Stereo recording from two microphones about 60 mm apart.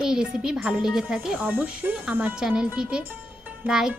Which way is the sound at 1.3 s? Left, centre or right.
Right.